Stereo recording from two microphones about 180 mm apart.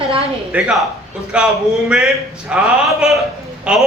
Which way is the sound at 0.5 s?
5° right (ahead or behind).